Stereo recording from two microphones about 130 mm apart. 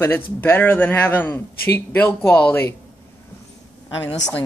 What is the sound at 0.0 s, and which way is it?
A man's voice, 15° left (ahead or behind).